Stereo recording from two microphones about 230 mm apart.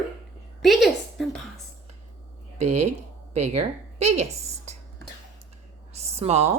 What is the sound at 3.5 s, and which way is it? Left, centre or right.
Speech, right.